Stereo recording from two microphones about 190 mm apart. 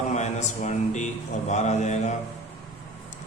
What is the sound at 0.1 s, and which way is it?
Speech, 35° left (ahead or behind).